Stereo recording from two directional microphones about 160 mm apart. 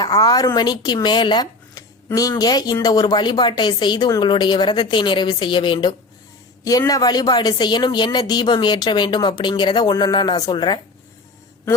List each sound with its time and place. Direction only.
0.0 s speech: 25° left (ahead or behind)